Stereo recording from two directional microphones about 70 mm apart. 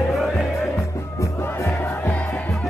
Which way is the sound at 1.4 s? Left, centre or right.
Left.